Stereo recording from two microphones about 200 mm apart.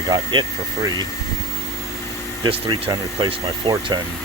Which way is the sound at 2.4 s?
25° right (ahead or behind).